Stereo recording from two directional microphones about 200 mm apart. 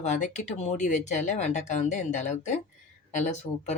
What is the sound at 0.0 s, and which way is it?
Speech, 35° left (ahead or behind).